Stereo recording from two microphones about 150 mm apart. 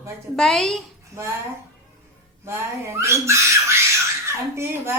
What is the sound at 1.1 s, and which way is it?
Speech, 20° right (ahead or behind).